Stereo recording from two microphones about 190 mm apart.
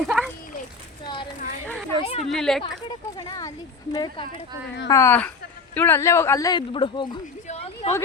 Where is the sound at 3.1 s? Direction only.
20° left (ahead or behind).